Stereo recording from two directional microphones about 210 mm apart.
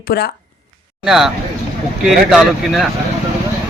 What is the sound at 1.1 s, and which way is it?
A man's voice, centre (ahead or behind).